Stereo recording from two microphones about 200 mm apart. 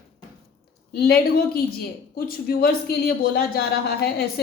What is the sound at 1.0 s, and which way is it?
A woman's voice, 50° left (ahead or behind).